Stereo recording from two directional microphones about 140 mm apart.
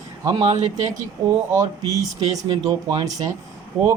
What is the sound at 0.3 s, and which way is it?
Speech, 30° right (ahead or behind).